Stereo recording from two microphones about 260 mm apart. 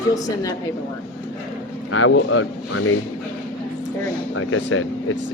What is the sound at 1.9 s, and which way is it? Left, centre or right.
Speech, left.